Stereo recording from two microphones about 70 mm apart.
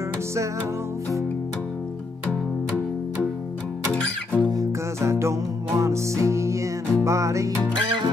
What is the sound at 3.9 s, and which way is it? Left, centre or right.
Music, centre.